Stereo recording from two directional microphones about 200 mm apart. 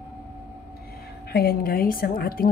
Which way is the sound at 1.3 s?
50° left (ahead or behind).